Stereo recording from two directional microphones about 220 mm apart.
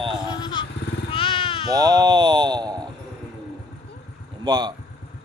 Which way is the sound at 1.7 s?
15° right (ahead or behind).